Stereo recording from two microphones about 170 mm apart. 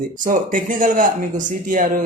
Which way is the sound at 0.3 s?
50° right (ahead or behind).